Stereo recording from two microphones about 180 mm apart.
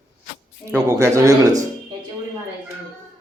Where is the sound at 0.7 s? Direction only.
15° right (ahead or behind).